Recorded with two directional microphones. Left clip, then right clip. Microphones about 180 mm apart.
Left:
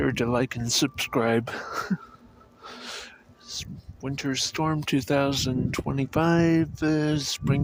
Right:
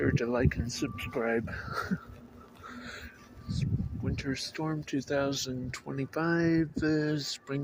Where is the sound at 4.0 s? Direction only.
45° left (ahead or behind).